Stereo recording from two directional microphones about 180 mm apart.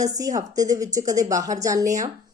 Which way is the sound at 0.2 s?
20° right (ahead or behind).